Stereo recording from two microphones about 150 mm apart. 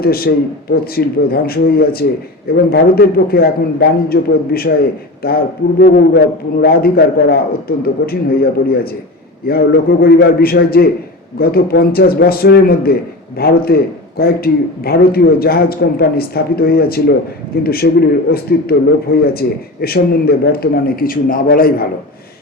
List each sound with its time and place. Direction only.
0.0 s a man's voice: 90° left; by 21.8 s 75° left (ahead or behind)